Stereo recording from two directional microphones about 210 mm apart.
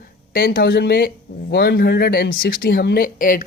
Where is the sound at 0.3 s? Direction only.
45° left (ahead or behind).